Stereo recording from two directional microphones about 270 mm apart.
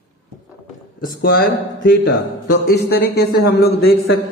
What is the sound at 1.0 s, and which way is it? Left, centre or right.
Speech, left.